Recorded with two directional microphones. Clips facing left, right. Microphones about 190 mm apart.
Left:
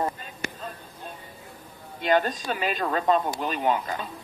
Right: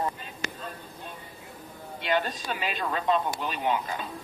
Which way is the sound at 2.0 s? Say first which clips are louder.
Left 5 dB; 45° left (ahead or behind).